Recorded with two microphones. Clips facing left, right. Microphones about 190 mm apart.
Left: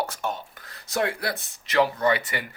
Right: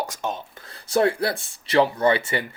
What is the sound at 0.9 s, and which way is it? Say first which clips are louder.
Speech: right 6 dB; 30° right (ahead or behind).